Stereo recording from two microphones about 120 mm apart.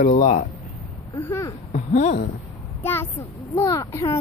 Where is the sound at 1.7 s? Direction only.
70° left (ahead or behind).